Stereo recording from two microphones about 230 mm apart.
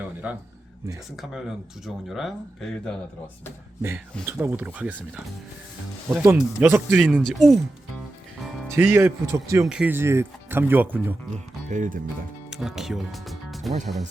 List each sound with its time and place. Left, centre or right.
0.2 s speech: centre
4.3 s speech: centre
6.1 s speech: centre
8.4 s music: centre
8.7 s speech: centre
11.7 s speech: right
12.5 s speech: centre